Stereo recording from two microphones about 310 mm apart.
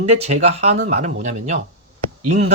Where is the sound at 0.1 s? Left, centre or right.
Right.